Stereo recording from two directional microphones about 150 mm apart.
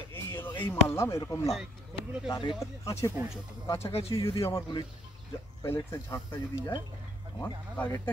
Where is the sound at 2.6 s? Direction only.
20° left (ahead or behind).